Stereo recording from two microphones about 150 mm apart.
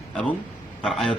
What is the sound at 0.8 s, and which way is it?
Speech, 5° left (ahead or behind).